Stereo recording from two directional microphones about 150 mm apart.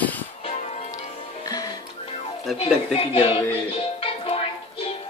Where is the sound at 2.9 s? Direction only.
40° left (ahead or behind).